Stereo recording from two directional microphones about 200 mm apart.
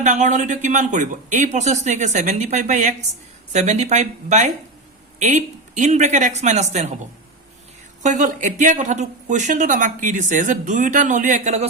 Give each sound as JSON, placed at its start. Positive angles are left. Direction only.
{"t": 0.0, "sound": "speech", "side_deg": -35}
{"t": 8.0, "sound": "speech", "side_deg": -35}